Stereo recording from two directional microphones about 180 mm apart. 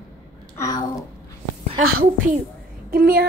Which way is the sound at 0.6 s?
20° left (ahead or behind).